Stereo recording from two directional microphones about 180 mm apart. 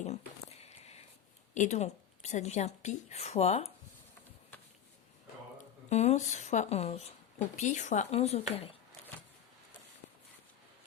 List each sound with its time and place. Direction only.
0.0 s a sound: 35° left (ahead or behind)
1.5 s a woman's voice: 40° left (ahead or behind)
5.9 s a woman's voice: 40° left (ahead or behind)